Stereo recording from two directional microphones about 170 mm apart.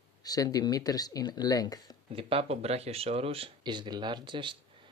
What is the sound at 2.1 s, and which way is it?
Speech, 35° right (ahead or behind).